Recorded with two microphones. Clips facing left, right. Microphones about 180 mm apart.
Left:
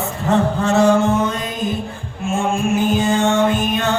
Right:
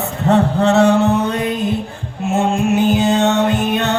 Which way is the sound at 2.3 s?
65° right (ahead or behind).